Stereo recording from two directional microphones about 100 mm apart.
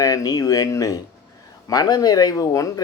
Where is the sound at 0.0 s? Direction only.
35° left (ahead or behind).